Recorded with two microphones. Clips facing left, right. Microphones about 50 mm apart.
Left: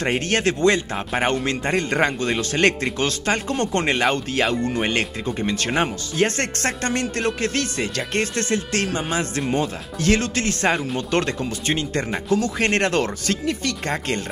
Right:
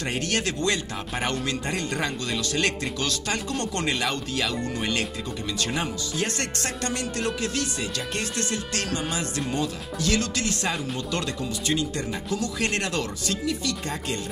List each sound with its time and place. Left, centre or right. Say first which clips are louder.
0.0 s speech: left 6 dB; left